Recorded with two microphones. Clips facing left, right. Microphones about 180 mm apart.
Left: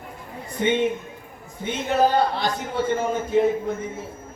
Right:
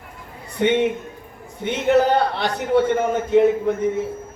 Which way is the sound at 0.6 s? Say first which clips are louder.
Right 3 dB; 65° right (ahead or behind).